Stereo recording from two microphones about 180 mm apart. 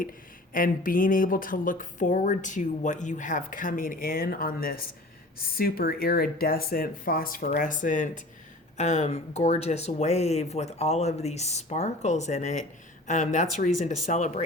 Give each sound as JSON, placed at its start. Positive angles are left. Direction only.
{"t": 0.5, "sound": "speech", "side_deg": 50}